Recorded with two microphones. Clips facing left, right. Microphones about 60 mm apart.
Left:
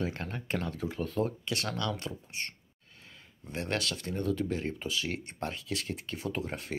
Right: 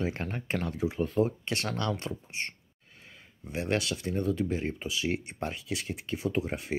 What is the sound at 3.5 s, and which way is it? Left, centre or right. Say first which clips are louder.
Speech: right 3 dB; centre.